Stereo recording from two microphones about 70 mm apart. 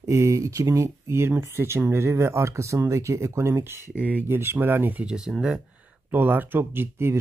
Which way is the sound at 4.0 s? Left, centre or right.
Right.